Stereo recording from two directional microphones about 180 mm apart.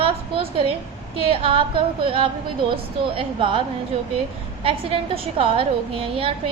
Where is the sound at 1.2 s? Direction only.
30° right (ahead or behind).